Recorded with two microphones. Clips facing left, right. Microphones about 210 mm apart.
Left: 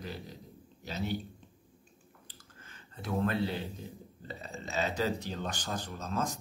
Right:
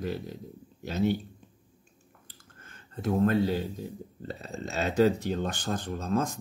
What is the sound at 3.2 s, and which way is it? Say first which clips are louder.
A man's voice: right 6 dB; 40° right (ahead or behind).